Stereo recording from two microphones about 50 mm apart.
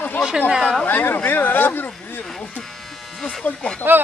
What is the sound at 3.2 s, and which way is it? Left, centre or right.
Speech, centre.